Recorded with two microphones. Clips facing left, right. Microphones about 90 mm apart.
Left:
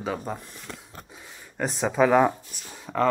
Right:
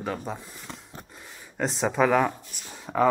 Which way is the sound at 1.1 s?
5° left (ahead or behind).